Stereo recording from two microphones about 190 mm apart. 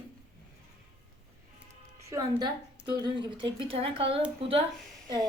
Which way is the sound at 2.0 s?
20° right (ahead or behind).